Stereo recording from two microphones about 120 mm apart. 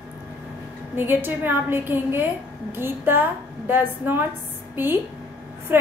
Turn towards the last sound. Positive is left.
turn(degrees=-20)  # may be behind; listen again after turning